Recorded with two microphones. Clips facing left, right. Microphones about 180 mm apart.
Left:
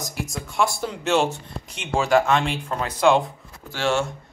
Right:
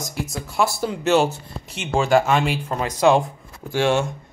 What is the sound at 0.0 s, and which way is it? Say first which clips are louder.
Speech: right 2 dB; centre (ahead or behind).